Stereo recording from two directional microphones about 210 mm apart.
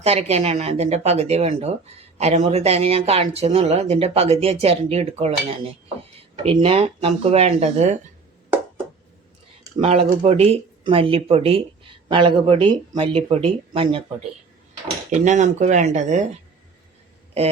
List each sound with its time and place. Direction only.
0.0 s speech: 30° right (ahead or behind)
9.8 s speech: 30° right (ahead or behind)
15.2 s speech: 35° right (ahead or behind)